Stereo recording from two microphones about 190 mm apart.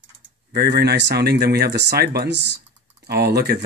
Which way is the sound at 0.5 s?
60° right (ahead or behind).